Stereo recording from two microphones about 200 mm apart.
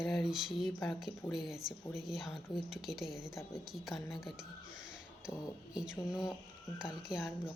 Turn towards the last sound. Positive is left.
turn(degrees=0)  # may be behind; listen again after turning